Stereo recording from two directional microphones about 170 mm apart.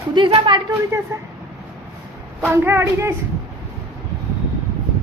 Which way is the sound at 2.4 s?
15° right (ahead or behind).